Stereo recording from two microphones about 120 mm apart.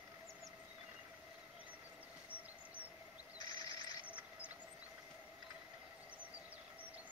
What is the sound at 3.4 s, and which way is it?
Bird, 35° left (ahead or behind).